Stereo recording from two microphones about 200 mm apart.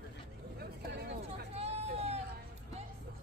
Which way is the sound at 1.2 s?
30° right (ahead or behind).